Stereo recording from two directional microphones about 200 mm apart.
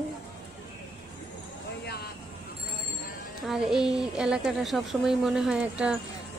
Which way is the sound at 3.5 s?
5° right (ahead or behind).